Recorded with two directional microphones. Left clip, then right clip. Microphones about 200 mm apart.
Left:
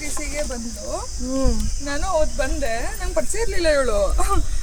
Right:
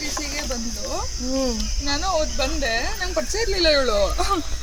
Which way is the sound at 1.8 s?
15° left (ahead or behind).